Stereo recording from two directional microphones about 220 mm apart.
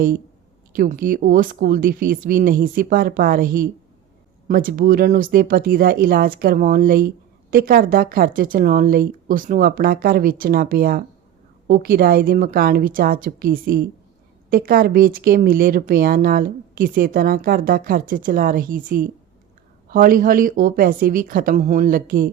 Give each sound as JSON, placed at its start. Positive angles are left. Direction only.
{"t": 0.7, "sound": "a woman's voice", "side_deg": -40}